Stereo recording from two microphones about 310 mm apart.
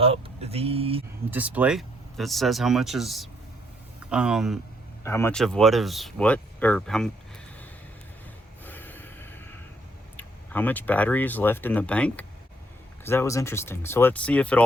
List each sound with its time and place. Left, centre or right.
0.0 s speech: centre
1.3 s speech: centre
8.6 s a sound: centre
10.2 s speech: centre